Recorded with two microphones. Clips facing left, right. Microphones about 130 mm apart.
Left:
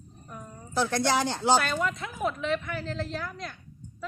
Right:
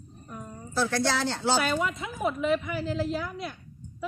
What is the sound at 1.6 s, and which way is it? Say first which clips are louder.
A woman's voice: right 2 dB; 5° right (ahead or behind).